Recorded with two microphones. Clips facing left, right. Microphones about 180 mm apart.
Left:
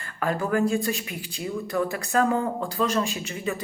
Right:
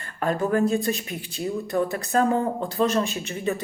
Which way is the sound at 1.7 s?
30° right (ahead or behind).